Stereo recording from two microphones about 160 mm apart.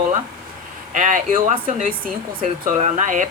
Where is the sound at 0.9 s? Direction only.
50° right (ahead or behind).